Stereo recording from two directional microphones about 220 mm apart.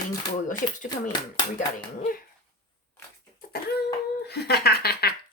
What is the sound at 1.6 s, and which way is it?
Speech, 35° left (ahead or behind).